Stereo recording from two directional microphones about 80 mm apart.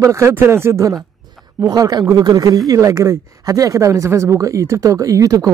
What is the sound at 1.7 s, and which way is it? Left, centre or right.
Speech, right.